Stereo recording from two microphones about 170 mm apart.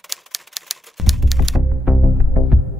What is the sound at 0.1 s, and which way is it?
Typewriter, centre (ahead or behind).